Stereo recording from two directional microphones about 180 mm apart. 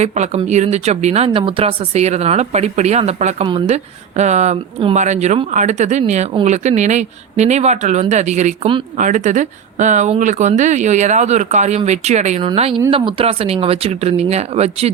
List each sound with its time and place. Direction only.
0.0 s speech: 40° right (ahead or behind)